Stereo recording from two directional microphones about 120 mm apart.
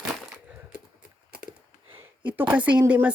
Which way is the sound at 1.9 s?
15° right (ahead or behind).